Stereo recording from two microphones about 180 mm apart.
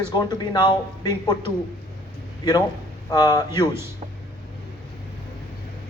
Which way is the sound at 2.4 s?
20° left (ahead or behind).